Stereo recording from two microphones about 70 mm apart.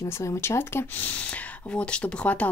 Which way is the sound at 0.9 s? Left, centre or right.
Left.